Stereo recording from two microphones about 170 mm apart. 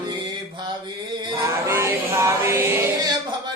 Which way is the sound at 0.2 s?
25° right (ahead or behind).